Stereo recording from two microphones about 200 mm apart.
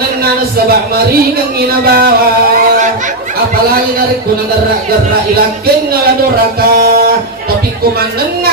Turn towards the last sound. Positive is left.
turn(degrees=-50)  # may be behind; listen again after turning